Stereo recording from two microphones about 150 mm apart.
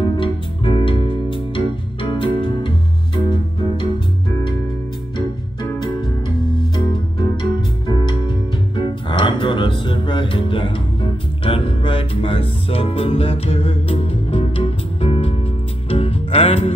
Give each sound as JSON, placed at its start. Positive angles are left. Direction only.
{"t": 0.0, "sound": "music", "side_deg": 35}
{"t": 5.1, "sound": "music", "side_deg": 30}